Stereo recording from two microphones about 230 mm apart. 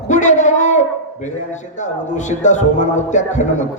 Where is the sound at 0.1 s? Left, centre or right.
Left.